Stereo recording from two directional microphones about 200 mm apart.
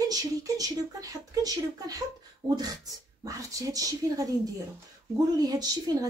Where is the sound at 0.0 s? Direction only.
20° right (ahead or behind).